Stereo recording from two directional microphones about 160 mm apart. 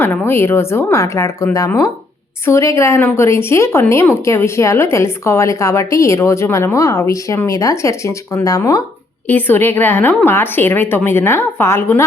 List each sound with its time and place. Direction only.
0.0 s a woman's voice: 15° left (ahead or behind)